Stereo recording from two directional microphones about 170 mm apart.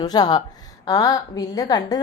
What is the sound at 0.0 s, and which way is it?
A woman's voice, 25° left (ahead or behind).